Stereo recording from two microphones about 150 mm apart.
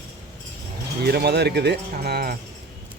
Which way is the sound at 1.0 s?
90° right.